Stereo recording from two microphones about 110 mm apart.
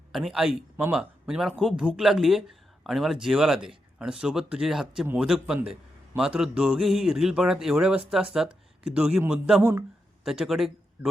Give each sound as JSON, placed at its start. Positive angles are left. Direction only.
{"t": 0.1, "sound": "a man's voice", "side_deg": 0}
{"t": 10.2, "sound": "speech", "side_deg": -5}